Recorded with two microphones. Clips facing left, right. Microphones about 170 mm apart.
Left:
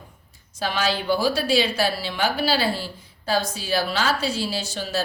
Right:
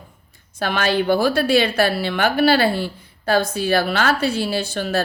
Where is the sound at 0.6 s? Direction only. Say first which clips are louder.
Right 5 dB; 60° right (ahead or behind).